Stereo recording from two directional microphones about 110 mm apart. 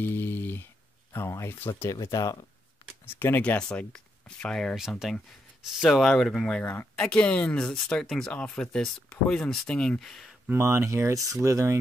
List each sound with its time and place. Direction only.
0.0 s a sound: 20° left (ahead or behind)
1.1 s speech: 25° left (ahead or behind)
3.1 s speech: 20° left (ahead or behind)
4.7 s speech: 5° right (ahead or behind)
6.6 s speech: 20° left (ahead or behind)
10.5 s speech: 25° right (ahead or behind)